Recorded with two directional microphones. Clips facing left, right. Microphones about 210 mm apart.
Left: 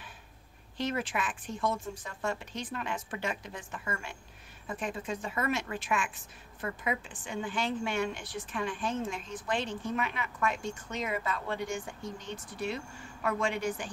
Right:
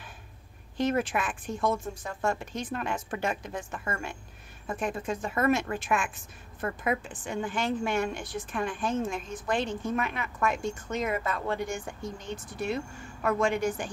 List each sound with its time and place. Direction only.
0.7 s a woman's voice: 50° right (ahead or behind)